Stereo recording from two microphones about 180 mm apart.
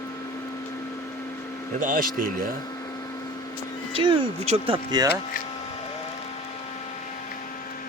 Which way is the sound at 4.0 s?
30° right (ahead or behind).